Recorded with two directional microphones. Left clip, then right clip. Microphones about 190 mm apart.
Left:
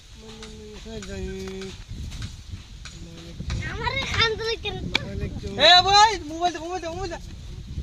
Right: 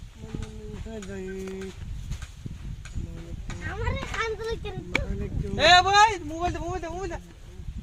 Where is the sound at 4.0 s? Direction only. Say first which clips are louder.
Left 8 dB; 35° left (ahead or behind).